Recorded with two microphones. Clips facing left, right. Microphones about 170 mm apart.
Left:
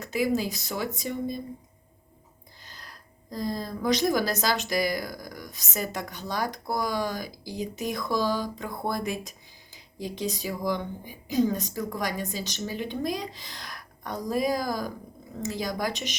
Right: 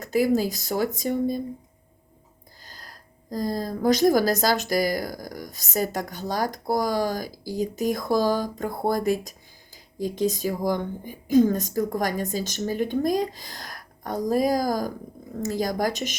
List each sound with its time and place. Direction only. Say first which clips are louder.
0.0 s speech: right 5 dB; 40° right (ahead or behind)
2.6 s speech: right 2 dB; 40° right (ahead or behind)